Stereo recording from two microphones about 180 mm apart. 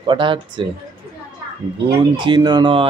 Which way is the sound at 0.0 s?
25° right (ahead or behind).